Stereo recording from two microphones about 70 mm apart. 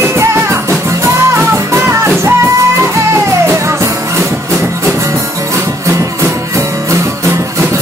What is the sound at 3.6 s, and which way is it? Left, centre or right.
Music, right.